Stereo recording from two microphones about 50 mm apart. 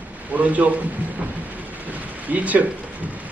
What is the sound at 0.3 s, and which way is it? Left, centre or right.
A woman's voice, right.